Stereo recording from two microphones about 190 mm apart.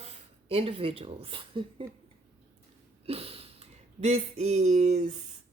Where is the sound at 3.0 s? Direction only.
30° right (ahead or behind).